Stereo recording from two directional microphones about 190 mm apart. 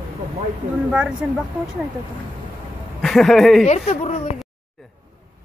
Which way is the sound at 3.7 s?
35° left (ahead or behind).